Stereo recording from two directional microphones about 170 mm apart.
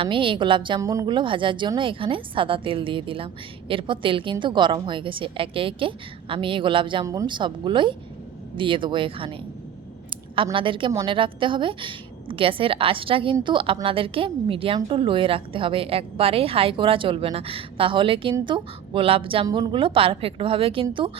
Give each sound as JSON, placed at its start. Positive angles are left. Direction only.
{"t": 0.0, "sound": "a woman's voice", "side_deg": -30}
{"t": 10.3, "sound": "a woman's voice", "side_deg": -30}